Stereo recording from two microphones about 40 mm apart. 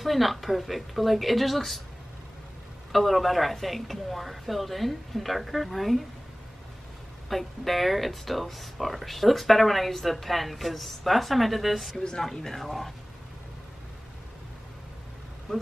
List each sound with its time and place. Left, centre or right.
0.0 s speech: centre
2.9 s speech: centre
7.2 s speech: centre
12.0 s speech: centre
12.3 s speech: centre